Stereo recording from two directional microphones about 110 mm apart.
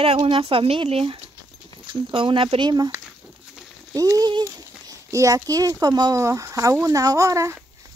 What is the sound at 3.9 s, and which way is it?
A child's voice, 30° right (ahead or behind).